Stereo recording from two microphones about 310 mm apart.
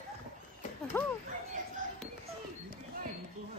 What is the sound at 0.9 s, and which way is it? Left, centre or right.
Speech, centre.